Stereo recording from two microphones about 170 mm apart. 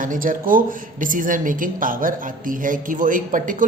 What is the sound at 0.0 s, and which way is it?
Speech, 55° right (ahead or behind).